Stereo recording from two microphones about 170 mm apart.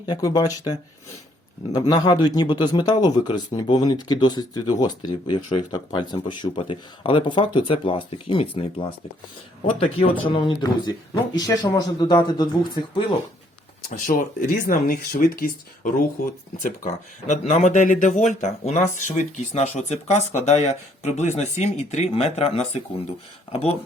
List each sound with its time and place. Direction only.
0.0 s speech: 20° left (ahead or behind)
14.1 s speech: 50° left (ahead or behind)